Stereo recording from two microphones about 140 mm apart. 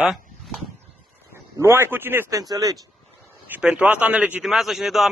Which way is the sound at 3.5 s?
10° right (ahead or behind).